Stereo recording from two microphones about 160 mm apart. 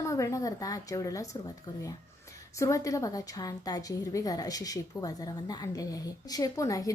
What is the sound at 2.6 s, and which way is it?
A woman's voice, 20° left (ahead or behind).